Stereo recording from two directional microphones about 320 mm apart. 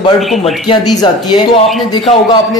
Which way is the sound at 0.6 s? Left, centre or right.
Centre.